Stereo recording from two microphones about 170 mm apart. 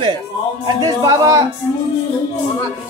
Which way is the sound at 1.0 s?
20° right (ahead or behind).